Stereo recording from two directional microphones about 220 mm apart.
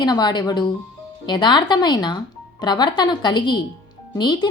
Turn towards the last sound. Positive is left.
turn(degrees=20)  # may be behind; listen again after turning